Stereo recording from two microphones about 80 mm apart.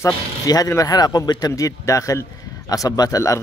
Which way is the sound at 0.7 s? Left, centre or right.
Left.